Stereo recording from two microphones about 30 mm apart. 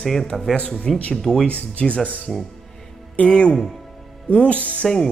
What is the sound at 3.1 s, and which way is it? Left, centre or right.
Speech, left.